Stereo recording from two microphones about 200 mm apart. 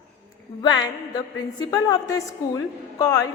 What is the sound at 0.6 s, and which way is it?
A woman's voice, 20° left (ahead or behind).